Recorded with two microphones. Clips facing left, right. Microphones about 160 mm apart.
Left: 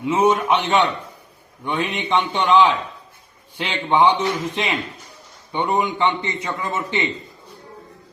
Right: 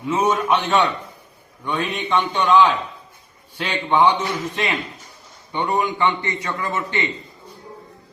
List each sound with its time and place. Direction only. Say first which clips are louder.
0.1 s a man's voice: left 2 dB; 20° left (ahead or behind)